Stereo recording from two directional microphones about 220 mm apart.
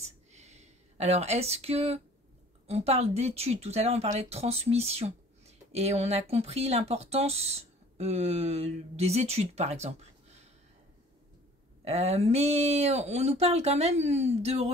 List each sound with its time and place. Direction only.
0.3 s a sound: 30° right (ahead or behind)
2.6 s speech: 30° right (ahead or behind)
11.8 s speech: 30° right (ahead or behind)